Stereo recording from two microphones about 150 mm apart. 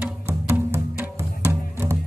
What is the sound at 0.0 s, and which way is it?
Music, 15° right (ahead or behind).